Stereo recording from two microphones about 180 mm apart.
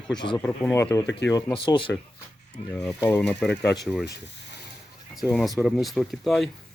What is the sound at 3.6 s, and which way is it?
Speech, 70° left (ahead or behind).